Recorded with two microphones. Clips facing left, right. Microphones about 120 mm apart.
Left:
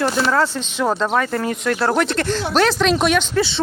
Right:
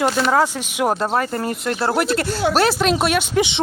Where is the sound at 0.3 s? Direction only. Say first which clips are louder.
Right 1 dB; 15° right (ahead or behind).